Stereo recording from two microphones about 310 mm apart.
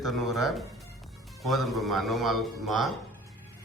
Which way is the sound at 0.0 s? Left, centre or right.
Centre.